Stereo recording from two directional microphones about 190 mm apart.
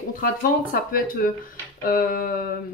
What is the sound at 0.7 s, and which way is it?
Speech, 50° left (ahead or behind).